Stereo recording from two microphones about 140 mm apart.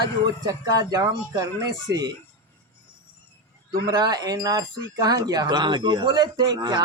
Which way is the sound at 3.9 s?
30° right (ahead or behind).